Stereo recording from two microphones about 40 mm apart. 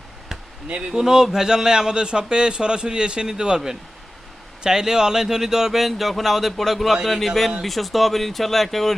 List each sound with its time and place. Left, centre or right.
0.9 s a man's voice: centre